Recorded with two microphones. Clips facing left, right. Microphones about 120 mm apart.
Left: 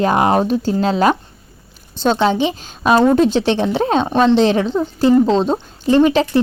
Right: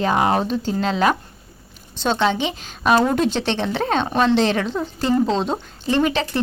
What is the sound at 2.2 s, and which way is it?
Speech, 35° left (ahead or behind).